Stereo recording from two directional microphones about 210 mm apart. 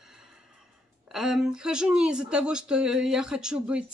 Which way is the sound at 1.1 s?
Centre (ahead or behind).